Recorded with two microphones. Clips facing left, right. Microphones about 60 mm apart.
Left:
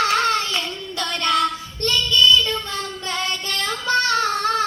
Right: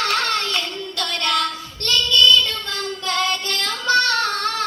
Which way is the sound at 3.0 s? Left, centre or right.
Centre.